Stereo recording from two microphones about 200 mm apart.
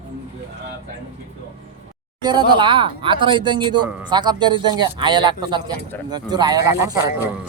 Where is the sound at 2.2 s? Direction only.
20° right (ahead or behind).